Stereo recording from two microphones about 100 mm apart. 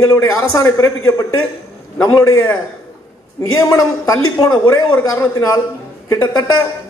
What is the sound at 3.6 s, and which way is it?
A man's voice, 35° left (ahead or behind).